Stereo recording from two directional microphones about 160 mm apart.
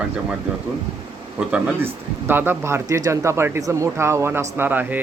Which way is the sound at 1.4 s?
5° right (ahead or behind).